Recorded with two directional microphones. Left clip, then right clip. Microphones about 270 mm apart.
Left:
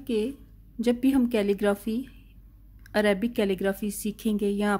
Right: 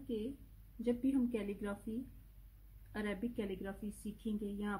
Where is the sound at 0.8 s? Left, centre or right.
Left.